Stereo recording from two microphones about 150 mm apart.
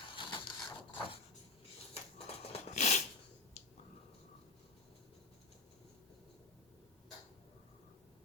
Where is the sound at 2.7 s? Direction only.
50° left (ahead or behind).